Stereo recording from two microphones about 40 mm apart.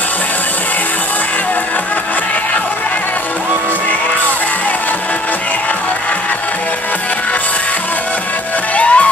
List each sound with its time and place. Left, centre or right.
8.7 s music: left